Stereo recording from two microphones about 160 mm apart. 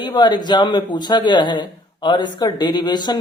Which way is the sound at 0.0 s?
30° left (ahead or behind).